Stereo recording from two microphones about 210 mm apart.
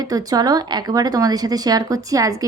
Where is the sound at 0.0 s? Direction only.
15° right (ahead or behind).